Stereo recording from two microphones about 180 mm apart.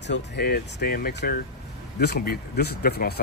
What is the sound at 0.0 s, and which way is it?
Speech, 70° left (ahead or behind).